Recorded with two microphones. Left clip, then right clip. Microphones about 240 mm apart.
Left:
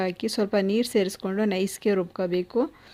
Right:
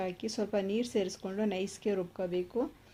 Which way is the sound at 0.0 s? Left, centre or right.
Left.